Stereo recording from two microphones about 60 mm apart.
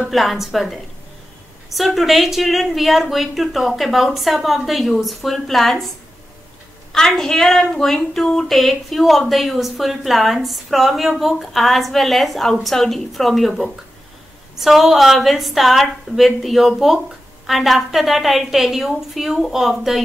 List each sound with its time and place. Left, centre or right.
0.1 s speech: centre
6.9 s a woman's voice: centre